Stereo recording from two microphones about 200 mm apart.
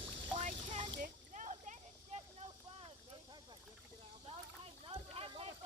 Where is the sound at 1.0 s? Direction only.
40° right (ahead or behind).